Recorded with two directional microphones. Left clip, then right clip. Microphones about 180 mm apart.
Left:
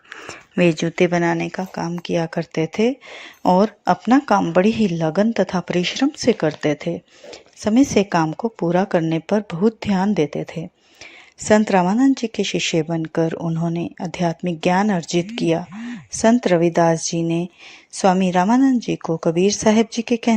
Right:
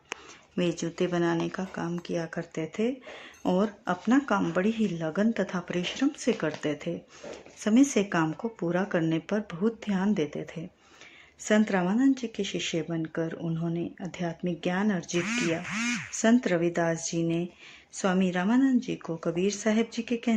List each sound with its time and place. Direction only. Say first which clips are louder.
0.5 s a woman's voice: left 12 dB; 30° left (ahead or behind)
16.4 s speech: left 11 dB; 30° left (ahead or behind)